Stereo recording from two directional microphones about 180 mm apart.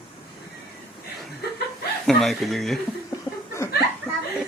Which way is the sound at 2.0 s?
Centre (ahead or behind).